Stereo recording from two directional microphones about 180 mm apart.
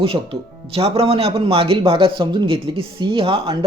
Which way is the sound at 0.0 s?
30° right (ahead or behind).